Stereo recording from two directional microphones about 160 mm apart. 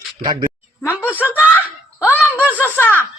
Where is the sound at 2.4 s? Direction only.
10° right (ahead or behind).